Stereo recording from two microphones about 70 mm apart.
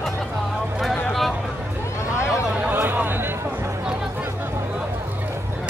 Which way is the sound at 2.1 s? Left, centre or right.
Centre.